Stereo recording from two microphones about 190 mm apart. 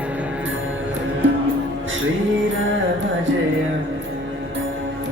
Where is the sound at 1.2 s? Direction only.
85° right.